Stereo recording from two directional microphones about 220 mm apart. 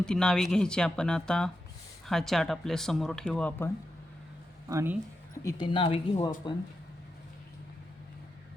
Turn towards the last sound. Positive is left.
turn(degrees=20)  # may be behind; listen again after turning